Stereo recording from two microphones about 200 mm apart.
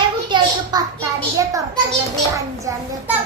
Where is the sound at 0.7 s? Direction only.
20° right (ahead or behind).